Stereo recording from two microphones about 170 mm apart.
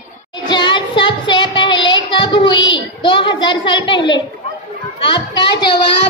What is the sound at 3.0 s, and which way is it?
Speech, 30° left (ahead or behind).